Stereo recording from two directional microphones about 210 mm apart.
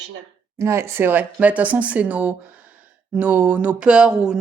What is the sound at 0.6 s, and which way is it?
Speech, 10° right (ahead or behind).